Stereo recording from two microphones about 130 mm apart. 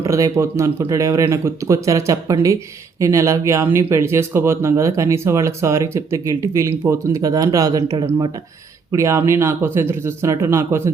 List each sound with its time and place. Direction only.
0.0 s speech: 25° right (ahead or behind)